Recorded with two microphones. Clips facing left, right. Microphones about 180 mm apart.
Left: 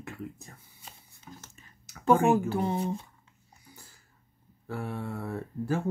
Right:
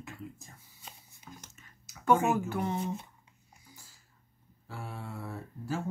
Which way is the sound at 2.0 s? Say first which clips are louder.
Left 4 dB; 30° left (ahead or behind).